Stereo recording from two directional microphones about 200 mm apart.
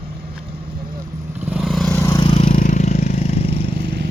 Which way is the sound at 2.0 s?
20° left (ahead or behind).